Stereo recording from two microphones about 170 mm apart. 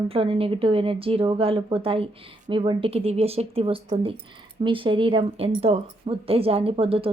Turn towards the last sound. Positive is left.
turn(degrees=-35)  # may be behind; listen again after turning